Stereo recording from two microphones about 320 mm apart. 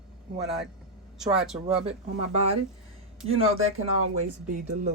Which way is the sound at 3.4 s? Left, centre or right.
Right.